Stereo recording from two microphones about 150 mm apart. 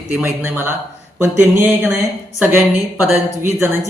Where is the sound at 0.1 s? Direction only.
15° right (ahead or behind).